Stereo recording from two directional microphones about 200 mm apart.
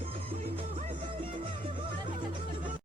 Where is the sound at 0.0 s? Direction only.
30° right (ahead or behind).